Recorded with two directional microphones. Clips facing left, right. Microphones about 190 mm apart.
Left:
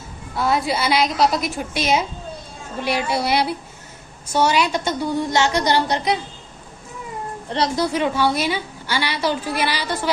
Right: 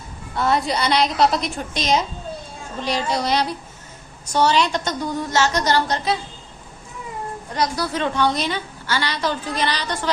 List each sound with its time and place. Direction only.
0.3 s a woman's voice: centre (ahead or behind)
7.5 s a woman's voice: 30° left (ahead or behind)
7.9 s a woman's voice: 10° left (ahead or behind)